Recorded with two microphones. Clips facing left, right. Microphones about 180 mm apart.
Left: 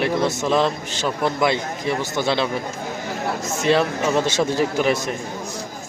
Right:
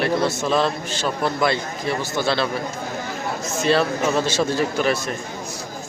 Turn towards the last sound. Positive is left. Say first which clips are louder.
# left 1 dB
turn(degrees=20)  # may be behind; listen again after turning